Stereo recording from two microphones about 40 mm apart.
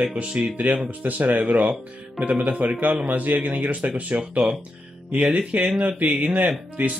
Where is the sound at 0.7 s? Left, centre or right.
Right.